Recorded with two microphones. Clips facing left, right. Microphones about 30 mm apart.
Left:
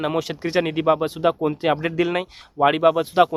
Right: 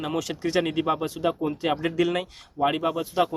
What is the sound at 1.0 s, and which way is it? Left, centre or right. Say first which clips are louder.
Speech: left 5 dB; left.